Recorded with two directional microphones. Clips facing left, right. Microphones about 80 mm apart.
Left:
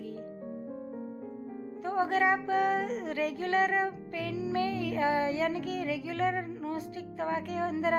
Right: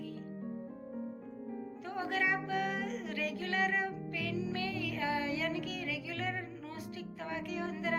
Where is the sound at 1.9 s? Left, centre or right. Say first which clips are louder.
Left 8 dB; left.